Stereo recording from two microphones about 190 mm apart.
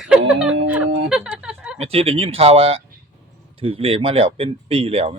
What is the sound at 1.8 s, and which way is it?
Speech, 30° right (ahead or behind).